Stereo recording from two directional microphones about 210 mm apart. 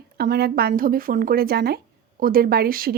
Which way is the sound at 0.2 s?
50° right (ahead or behind).